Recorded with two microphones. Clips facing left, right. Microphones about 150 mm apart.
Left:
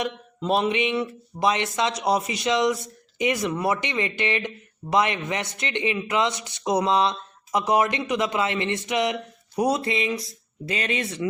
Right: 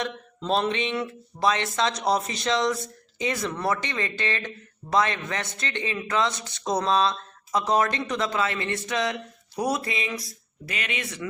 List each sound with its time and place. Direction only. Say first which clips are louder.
0.0 s speech: left 3 dB; 10° left (ahead or behind); by 11.3 s 30° left (ahead or behind)